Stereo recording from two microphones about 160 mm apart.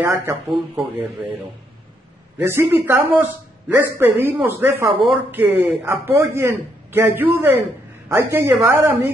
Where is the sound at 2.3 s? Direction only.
15° right (ahead or behind).